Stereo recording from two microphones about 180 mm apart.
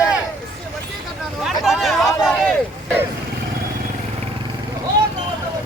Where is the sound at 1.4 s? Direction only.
Centre (ahead or behind).